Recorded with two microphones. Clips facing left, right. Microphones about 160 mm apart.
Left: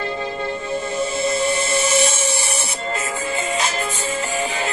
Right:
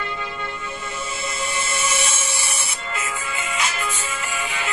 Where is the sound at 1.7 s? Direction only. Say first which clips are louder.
Left 7 dB; 35° left (ahead or behind).